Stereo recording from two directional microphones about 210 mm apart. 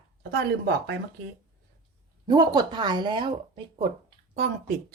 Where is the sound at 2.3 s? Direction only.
20° right (ahead or behind).